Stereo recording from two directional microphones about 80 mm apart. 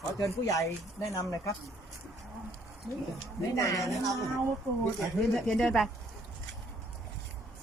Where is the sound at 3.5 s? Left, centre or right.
Left.